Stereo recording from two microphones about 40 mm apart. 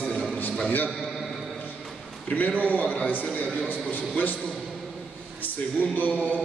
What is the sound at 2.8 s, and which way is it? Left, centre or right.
Speech, left.